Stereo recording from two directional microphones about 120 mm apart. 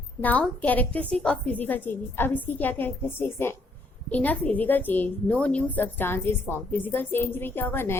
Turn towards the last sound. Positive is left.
turn(degrees=20)  # may be behind; listen again after turning